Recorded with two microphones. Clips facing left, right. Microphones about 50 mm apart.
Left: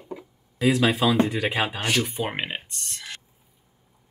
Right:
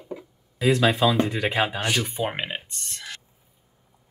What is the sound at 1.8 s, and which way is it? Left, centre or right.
Speech, centre.